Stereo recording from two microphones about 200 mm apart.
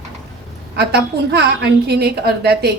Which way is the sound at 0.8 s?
55° right (ahead or behind).